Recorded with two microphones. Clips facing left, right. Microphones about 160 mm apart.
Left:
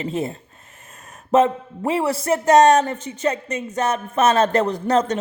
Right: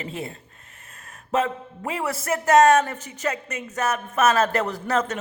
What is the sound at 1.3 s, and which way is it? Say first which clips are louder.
A man's voice: left 7 dB; 35° left (ahead or behind).